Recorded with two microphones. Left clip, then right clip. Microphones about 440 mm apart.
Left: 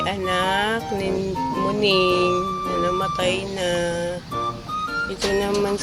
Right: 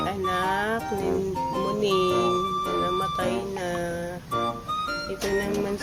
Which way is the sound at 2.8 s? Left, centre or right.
Right.